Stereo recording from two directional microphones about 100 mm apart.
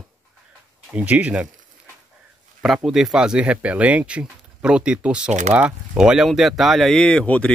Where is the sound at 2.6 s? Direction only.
Centre (ahead or behind).